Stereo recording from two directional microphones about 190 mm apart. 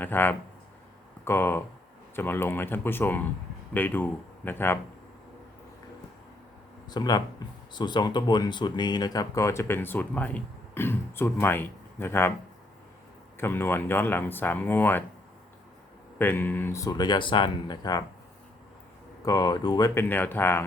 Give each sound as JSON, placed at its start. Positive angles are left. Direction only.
{"t": 0.0, "sound": "speech", "side_deg": 10}
{"t": 6.8, "sound": "speech", "side_deg": 20}
{"t": 13.3, "sound": "speech", "side_deg": 10}
{"t": 16.1, "sound": "speech", "side_deg": 10}
{"t": 19.2, "sound": "speech", "side_deg": 20}